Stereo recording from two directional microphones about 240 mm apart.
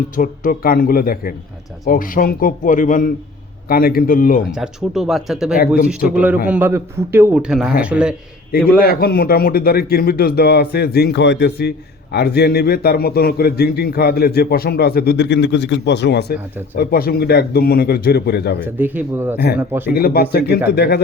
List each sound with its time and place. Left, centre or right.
0.2 s a man's voice: left
4.5 s a man's voice: centre
8.8 s a man's voice: left
18.6 s a man's voice: centre
19.9 s a man's voice: left